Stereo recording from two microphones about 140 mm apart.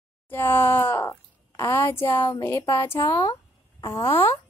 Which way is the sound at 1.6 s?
15° left (ahead or behind).